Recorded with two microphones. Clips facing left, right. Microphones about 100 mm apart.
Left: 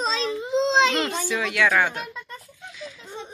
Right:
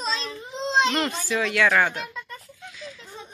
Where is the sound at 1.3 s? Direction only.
5° left (ahead or behind).